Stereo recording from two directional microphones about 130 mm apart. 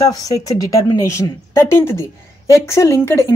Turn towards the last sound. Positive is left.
turn(degrees=20)  # may be behind; listen again after turning